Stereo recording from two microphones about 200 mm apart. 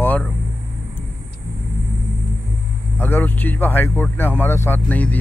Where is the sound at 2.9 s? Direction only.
10° left (ahead or behind).